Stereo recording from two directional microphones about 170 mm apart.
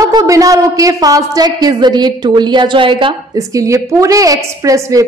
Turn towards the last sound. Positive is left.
turn(degrees=-20)  # may be behind; listen again after turning